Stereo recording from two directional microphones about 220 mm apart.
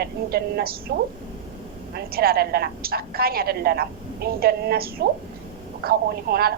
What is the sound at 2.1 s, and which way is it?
A woman's voice, 45° right (ahead or behind).